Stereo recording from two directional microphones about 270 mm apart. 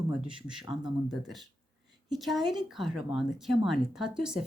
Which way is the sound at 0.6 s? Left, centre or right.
Centre.